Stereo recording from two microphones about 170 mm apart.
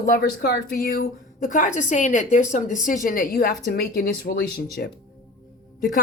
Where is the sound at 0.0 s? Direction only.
60° left (ahead or behind).